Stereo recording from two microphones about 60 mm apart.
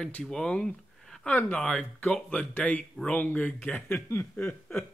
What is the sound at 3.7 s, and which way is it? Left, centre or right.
Speech, left.